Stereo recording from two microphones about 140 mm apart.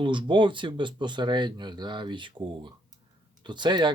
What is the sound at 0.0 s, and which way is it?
Speech, 35° right (ahead or behind).